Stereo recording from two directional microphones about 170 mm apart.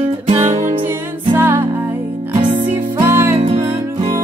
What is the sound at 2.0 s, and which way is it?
Music, 40° right (ahead or behind).